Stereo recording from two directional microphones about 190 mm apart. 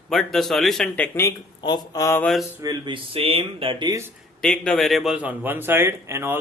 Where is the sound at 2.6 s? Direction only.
20° right (ahead or behind).